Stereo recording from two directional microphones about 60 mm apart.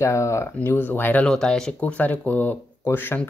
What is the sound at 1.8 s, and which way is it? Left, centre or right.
Speech, left.